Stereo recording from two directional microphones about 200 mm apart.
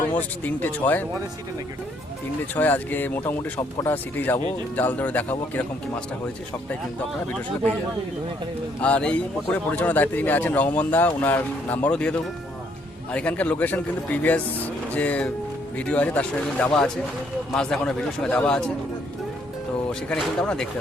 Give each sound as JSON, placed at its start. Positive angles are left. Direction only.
{"t": 0.2, "sound": "a man's voice", "side_deg": 10}
{"t": 2.6, "sound": "a man's voice", "side_deg": 10}
{"t": 8.8, "sound": "a man's voice", "side_deg": 5}
{"t": 19.9, "sound": "speech", "side_deg": 5}